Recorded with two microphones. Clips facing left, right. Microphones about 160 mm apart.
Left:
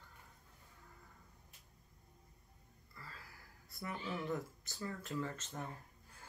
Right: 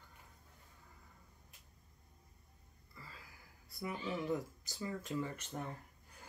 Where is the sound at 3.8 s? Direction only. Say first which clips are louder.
Right 2 dB; 15° right (ahead or behind).